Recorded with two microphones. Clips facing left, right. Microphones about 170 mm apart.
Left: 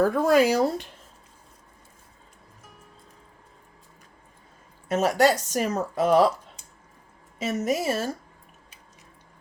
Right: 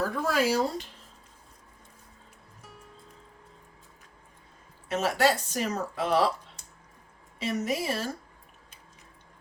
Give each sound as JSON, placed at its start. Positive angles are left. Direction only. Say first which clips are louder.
{"t": 0.0, "sound": "speech", "louder": "left 8 dB", "side_deg": 55}
{"t": 4.9, "sound": "speech", "louder": "left 4 dB", "side_deg": 45}
{"t": 7.3, "sound": "speech", "louder": "left 4 dB", "side_deg": 45}